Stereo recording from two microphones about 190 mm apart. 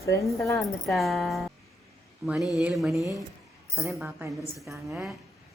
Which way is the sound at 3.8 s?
15° right (ahead or behind).